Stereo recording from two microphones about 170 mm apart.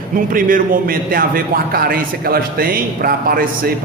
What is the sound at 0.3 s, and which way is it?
A man's voice, 55° right (ahead or behind).